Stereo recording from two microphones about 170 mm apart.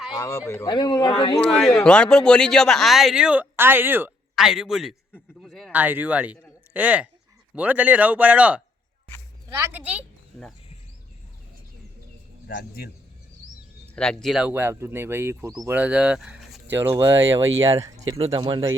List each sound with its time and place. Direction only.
0.1 s speech: 20° left (ahead or behind)
1.4 s a man's voice: centre (ahead or behind)
5.4 s a sound: centre (ahead or behind)
5.7 s a woman's voice: 10° right (ahead or behind)
12.5 s a man's voice: 65° left (ahead or behind)
13.9 s speech: 5° left (ahead or behind)
16.7 s speech: 15° right (ahead or behind)